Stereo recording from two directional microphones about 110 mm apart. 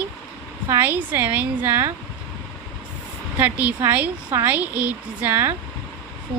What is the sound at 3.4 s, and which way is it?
A woman's voice, 15° right (ahead or behind).